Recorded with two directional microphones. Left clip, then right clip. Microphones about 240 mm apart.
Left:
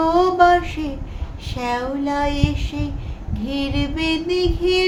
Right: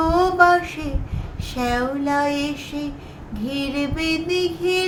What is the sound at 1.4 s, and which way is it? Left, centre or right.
Child singing, centre.